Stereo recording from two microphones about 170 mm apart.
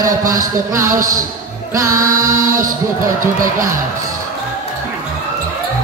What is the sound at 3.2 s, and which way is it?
Speech, 50° right (ahead or behind).